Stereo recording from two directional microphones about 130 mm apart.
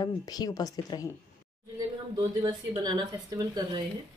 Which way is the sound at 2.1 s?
30° right (ahead or behind).